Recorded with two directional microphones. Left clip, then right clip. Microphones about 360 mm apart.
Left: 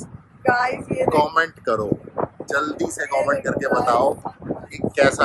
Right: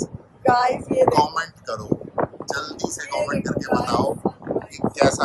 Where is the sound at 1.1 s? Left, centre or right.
Centre.